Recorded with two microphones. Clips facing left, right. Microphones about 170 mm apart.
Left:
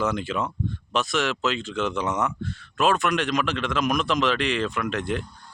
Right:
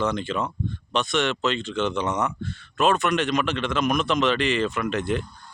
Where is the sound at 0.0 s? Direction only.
5° left (ahead or behind).